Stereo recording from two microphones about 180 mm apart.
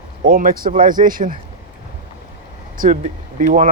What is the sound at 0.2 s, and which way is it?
Speech, 50° right (ahead or behind).